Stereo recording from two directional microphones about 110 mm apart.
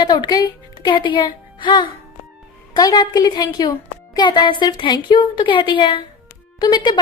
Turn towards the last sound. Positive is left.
turn(degrees=40)  # may be behind; listen again after turning